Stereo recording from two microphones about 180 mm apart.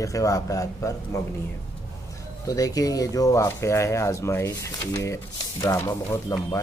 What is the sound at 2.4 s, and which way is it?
Speech, 20° left (ahead or behind).